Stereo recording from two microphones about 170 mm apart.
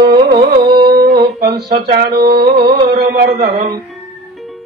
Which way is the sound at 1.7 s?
65° right (ahead or behind).